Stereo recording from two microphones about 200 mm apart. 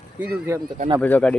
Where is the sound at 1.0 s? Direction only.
5° left (ahead or behind).